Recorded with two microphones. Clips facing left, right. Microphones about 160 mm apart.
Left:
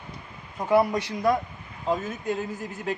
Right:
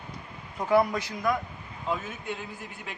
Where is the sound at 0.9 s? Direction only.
35° left (ahead or behind).